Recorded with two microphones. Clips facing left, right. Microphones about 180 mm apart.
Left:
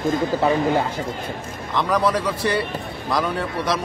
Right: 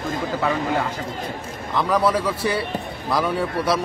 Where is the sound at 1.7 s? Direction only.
5° right (ahead or behind).